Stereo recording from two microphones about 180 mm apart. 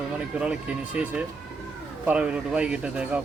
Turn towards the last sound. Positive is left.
turn(degrees=-5)  # may be behind; listen again after turning